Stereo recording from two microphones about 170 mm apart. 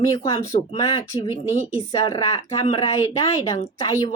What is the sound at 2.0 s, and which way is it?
Speech, 25° left (ahead or behind).